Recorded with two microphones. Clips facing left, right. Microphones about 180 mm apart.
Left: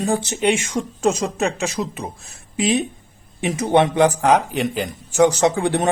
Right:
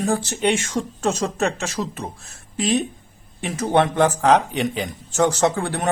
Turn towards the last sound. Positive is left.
turn(degrees=20)  # may be behind; listen again after turning